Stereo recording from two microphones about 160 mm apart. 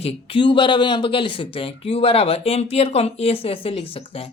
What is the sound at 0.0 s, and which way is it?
A woman's voice, 35° left (ahead or behind).